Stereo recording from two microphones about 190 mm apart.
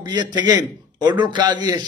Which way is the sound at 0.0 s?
20° right (ahead or behind).